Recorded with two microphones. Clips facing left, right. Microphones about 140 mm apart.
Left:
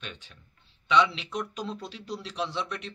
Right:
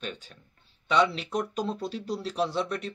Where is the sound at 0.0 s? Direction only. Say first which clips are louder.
Right 6 dB; 40° right (ahead or behind).